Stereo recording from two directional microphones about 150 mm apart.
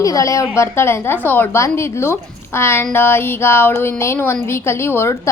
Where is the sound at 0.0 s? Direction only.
20° left (ahead or behind).